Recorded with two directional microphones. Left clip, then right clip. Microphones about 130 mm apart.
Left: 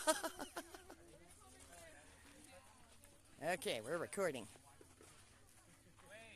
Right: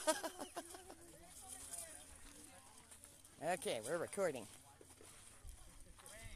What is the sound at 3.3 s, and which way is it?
Speech, 15° left (ahead or behind).